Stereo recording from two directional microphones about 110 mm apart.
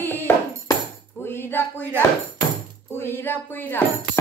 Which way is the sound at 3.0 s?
20° left (ahead or behind).